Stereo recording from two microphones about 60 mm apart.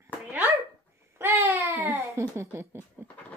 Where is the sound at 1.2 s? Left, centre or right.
Right.